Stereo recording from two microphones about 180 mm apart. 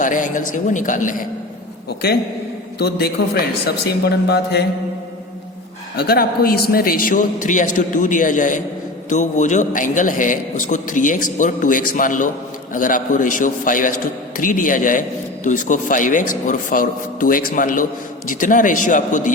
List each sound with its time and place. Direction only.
0.0 s a man's voice: 45° left (ahead or behind)
2.7 s speech: 60° left (ahead or behind)
6.0 s a man's voice: 60° left (ahead or behind)